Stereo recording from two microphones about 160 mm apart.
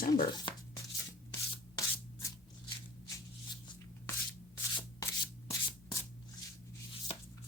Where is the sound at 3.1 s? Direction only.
25° left (ahead or behind).